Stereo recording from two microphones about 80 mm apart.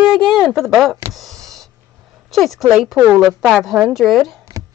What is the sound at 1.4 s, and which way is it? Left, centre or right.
Snort, centre.